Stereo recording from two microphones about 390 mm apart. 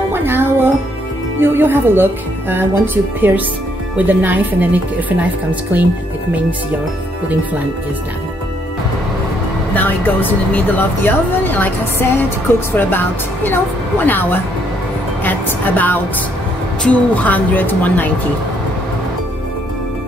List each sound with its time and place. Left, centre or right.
0.1 s music: centre
1.4 s a woman's voice: centre
9.8 s speech: centre